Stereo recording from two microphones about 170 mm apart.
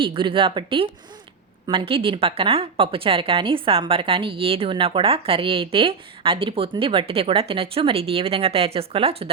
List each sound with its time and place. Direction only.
0.0 s a woman's voice: 30° right (ahead or behind)